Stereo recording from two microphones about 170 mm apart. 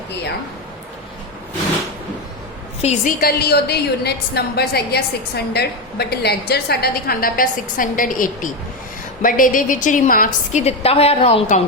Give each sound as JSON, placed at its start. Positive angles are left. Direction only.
{"t": 2.8, "sound": "a woman's voice", "side_deg": 55}